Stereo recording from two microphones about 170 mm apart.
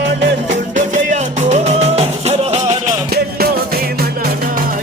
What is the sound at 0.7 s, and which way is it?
Music, 40° right (ahead or behind).